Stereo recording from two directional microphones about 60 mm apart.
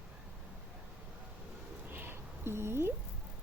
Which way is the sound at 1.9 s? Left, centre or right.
Right.